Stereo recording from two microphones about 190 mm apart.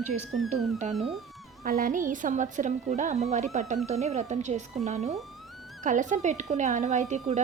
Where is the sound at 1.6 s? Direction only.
45° right (ahead or behind).